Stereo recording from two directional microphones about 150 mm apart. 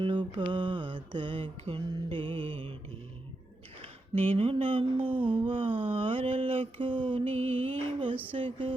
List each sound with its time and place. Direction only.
0.0 s mantra: 35° right (ahead or behind)
3.8 s speech: 40° right (ahead or behind)
5.2 s a sound: 35° right (ahead or behind)
8.3 s mantra: 35° right (ahead or behind)